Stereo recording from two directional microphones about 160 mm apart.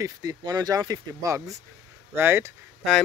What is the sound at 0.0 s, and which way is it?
Speech, 20° right (ahead or behind).